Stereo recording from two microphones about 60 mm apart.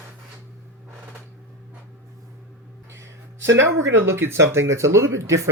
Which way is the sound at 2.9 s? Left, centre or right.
Right.